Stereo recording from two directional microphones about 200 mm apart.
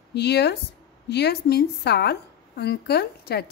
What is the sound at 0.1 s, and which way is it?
Speech, 55° left (ahead or behind).